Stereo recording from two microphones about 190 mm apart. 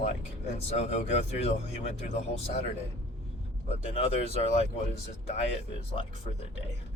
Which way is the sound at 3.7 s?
30° left (ahead or behind).